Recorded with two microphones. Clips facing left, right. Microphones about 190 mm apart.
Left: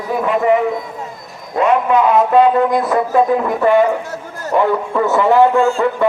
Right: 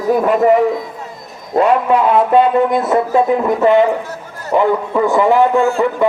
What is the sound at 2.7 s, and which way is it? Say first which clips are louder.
Speech: right 1 dB; 25° right (ahead or behind).